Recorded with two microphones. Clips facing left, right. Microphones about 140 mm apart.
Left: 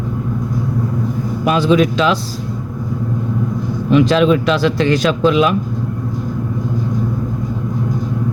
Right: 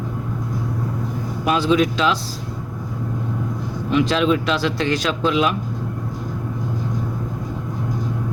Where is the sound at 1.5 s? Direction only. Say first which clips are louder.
Left 4 dB; 65° left (ahead or behind).